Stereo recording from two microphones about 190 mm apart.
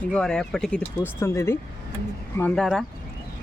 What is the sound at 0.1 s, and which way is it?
Speech, 5° left (ahead or behind).